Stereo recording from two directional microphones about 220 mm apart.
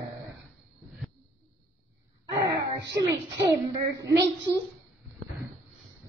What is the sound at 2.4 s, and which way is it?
Wail, 15° right (ahead or behind).